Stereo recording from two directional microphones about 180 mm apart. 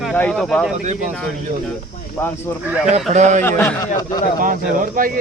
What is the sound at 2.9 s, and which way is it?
Speech, 40° right (ahead or behind).